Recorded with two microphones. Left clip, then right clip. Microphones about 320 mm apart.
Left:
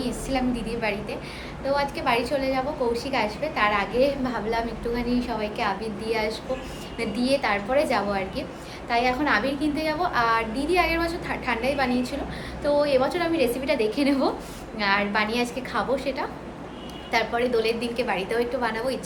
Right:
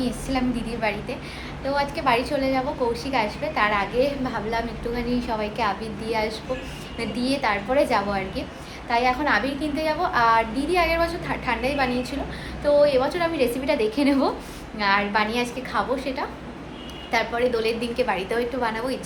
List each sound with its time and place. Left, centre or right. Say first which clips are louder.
0.0 s a woman's voice: right 1 dB; centre